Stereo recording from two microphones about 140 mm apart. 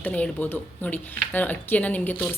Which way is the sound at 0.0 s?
10° left (ahead or behind).